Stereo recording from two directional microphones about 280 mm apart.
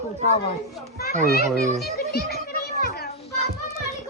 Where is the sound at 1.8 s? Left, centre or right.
Left.